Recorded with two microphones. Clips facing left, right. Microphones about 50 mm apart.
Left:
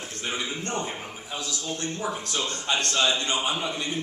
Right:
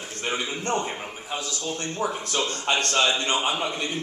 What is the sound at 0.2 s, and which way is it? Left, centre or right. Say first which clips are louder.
A man's voice: right 3 dB; right.